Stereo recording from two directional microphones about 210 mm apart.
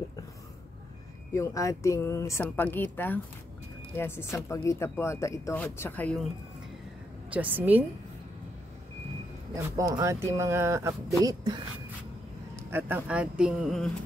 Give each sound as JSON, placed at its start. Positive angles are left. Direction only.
{"t": 1.3, "sound": "speech", "side_deg": 15}
{"t": 7.3, "sound": "speech", "side_deg": -10}
{"t": 9.8, "sound": "speech", "side_deg": -15}